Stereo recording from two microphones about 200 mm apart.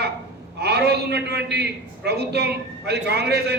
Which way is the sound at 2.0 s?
55° right (ahead or behind).